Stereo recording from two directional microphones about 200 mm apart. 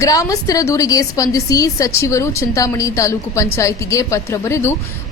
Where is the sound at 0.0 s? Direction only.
15° left (ahead or behind).